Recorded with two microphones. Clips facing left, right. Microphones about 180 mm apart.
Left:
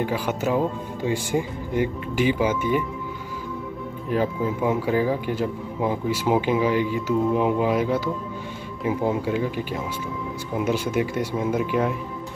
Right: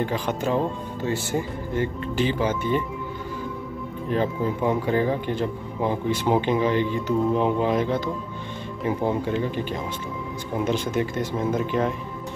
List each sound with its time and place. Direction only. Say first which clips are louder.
0.0 s speech: left 1 dB; 10° left (ahead or behind)
4.1 s speech: left 1 dB; 5° left (ahead or behind)